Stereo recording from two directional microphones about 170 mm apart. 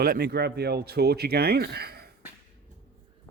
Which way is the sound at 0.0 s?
70° right (ahead or behind).